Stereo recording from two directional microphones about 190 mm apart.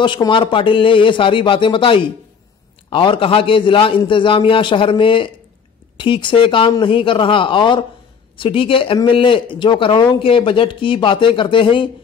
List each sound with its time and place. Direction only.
0.0 s speech: 25° left (ahead or behind)